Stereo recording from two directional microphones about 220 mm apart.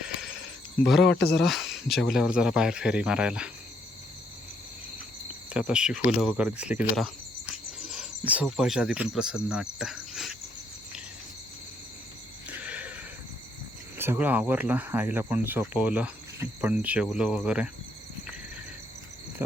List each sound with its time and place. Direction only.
0.0 s a sound: 5° right (ahead or behind)
0.9 s speech: centre (ahead or behind)
1.1 s speech: 45° left (ahead or behind)
1.4 s speech: centre (ahead or behind)
5.5 s speech: 5° right (ahead or behind)
12.5 s a sound: 5° right (ahead or behind)
14.0 s speech: 10° right (ahead or behind)
19.4 s speech: 10° right (ahead or behind)